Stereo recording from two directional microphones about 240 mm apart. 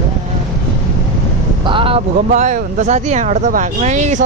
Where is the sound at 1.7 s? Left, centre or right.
Right.